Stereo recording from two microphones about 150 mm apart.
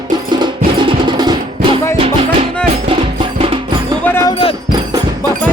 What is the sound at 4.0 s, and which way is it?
Music, 15° left (ahead or behind).